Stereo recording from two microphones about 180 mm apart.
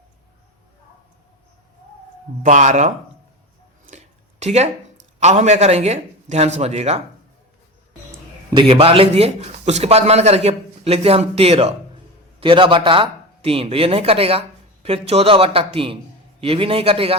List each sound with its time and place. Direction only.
2.4 s speech: 40° right (ahead or behind)
3.9 s a sound: 40° right (ahead or behind)
5.2 s a man's voice: 40° right (ahead or behind)
8.5 s a man's voice: 30° right (ahead or behind)